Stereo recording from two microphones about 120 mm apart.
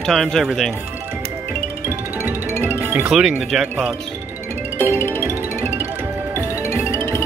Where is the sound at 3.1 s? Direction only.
5° right (ahead or behind).